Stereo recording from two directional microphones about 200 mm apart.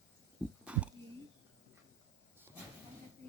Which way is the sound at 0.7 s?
5° right (ahead or behind).